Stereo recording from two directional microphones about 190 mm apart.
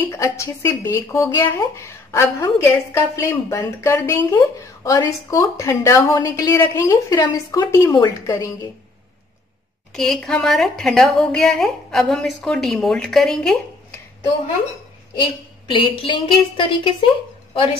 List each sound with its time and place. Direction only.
0.1 s speech: 15° left (ahead or behind)
9.9 s a woman's voice: centre (ahead or behind)
15.1 s a woman's voice: 25° left (ahead or behind)